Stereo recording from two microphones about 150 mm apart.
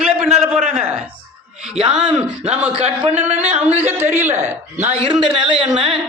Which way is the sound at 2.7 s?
40° right (ahead or behind).